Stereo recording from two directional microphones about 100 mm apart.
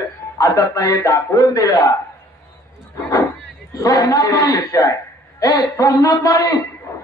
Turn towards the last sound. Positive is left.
turn(degrees=25)  # may be behind; listen again after turning